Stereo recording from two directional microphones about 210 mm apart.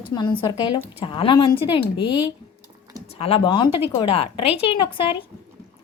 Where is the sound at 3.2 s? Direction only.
25° left (ahead or behind).